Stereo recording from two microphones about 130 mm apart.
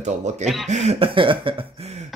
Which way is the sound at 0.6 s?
55° right (ahead or behind).